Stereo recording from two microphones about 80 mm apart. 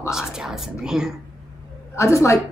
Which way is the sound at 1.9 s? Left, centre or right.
Left.